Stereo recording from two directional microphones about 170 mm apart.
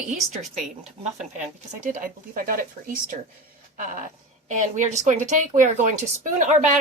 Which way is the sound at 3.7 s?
50° right (ahead or behind).